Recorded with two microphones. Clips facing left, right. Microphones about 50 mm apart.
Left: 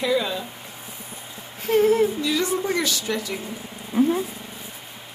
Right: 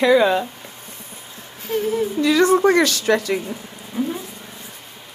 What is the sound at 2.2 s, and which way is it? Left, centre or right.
A woman's voice, right.